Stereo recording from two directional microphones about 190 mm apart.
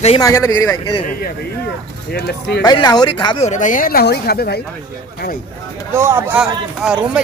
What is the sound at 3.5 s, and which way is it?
Speech, 40° left (ahead or behind).